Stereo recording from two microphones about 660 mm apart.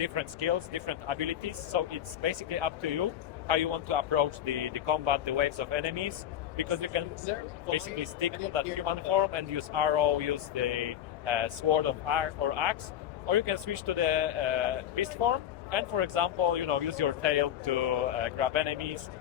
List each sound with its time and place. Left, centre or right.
0.0 s a man's voice: right